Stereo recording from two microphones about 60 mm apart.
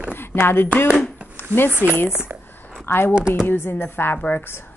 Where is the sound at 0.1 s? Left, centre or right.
Left.